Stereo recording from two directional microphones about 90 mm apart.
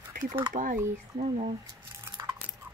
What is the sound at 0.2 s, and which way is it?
Speech, 50° right (ahead or behind).